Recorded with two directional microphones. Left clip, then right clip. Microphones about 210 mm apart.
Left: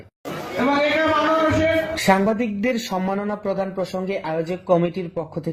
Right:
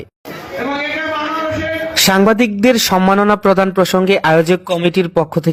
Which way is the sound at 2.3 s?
30° right (ahead or behind).